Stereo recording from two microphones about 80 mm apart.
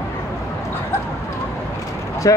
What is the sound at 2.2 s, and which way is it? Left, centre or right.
Speech, left.